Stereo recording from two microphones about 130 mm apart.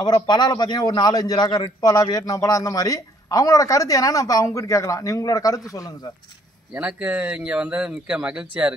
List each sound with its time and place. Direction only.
0.0 s a man's voice: 35° left (ahead or behind)
6.7 s speech: 10° right (ahead or behind)